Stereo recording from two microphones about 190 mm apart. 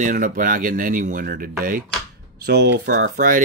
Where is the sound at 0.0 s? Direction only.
45° right (ahead or behind).